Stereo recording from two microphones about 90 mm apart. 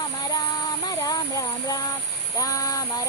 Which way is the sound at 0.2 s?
45° left (ahead or behind).